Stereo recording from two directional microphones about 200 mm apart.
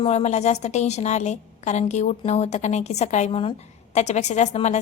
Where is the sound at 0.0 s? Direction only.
30° left (ahead or behind).